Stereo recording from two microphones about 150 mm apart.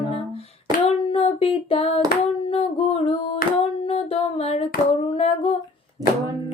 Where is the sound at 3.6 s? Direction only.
40° left (ahead or behind).